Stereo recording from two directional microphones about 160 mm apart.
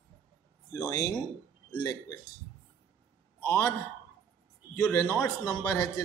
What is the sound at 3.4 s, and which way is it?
Speech, 15° left (ahead or behind).